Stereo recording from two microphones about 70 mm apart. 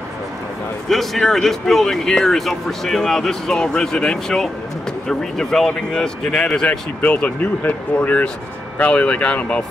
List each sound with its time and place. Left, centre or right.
0.8 s speech: centre